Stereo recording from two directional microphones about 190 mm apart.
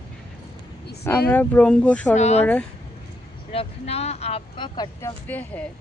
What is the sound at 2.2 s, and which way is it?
Speech, 35° left (ahead or behind).